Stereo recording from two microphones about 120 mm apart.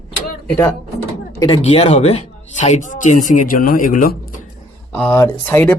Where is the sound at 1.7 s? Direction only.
60° left (ahead or behind); by 3.9 s 90° left.